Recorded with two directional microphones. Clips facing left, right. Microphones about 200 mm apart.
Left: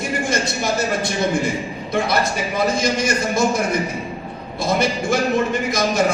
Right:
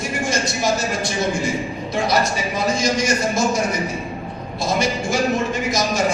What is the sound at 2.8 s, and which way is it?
Speech, 55° left (ahead or behind).